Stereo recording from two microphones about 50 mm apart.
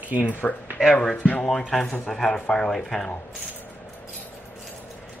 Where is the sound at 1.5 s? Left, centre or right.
Centre.